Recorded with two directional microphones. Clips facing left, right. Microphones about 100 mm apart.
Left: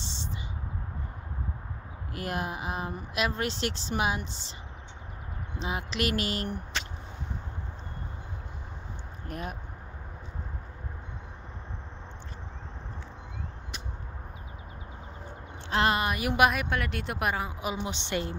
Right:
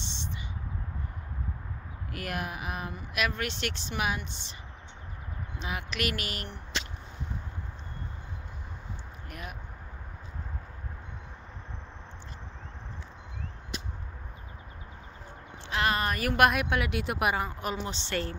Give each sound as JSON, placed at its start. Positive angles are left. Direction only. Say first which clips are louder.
{"t": 2.1, "sound": "a woman's voice", "louder": "left 2 dB", "side_deg": 25}
{"t": 5.6, "sound": "a woman's voice", "louder": "left 3 dB", "side_deg": 25}
{"t": 9.3, "sound": "speech", "louder": "left 6 dB", "side_deg": 30}
{"t": 15.7, "sound": "a woman's voice", "louder": "left 3 dB", "side_deg": 30}
{"t": 16.0, "sound": "a woman's voice", "louder": "even", "side_deg": 10}
{"t": 17.5, "sound": "a woman's voice", "louder": "left 1 dB", "side_deg": 5}